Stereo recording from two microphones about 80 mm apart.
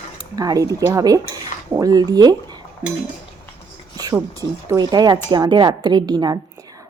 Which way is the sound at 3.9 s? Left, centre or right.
Right.